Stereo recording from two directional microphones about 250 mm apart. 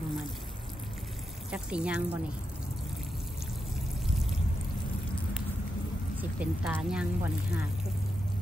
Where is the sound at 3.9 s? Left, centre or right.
Centre.